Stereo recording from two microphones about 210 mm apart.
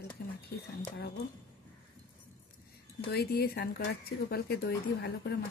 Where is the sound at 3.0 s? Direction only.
50° left (ahead or behind).